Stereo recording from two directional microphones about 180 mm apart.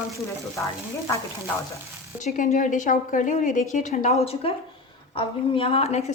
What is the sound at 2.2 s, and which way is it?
A woman's voice, 45° left (ahead or behind).